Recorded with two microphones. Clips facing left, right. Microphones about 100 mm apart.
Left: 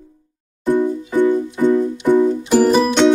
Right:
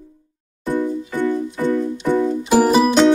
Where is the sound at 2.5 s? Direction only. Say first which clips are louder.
Right 1 dB; 10° right (ahead or behind).